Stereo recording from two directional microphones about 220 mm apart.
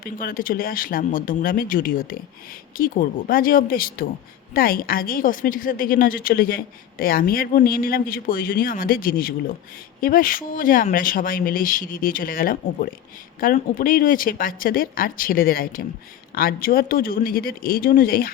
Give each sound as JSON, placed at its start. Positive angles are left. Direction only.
{"t": 0.0, "sound": "a woman's voice", "side_deg": 40}